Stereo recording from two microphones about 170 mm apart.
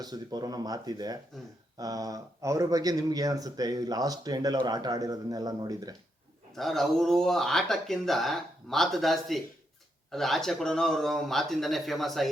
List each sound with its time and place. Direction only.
0.0 s speech: 25° right (ahead or behind)
6.6 s speech: centre (ahead or behind)